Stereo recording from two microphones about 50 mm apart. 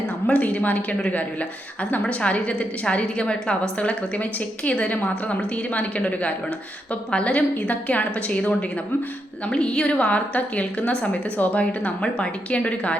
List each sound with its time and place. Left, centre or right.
0.3 s a woman's voice: left